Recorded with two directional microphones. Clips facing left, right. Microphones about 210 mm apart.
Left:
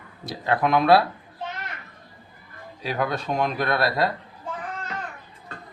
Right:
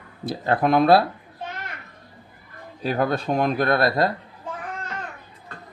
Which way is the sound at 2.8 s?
50° right (ahead or behind).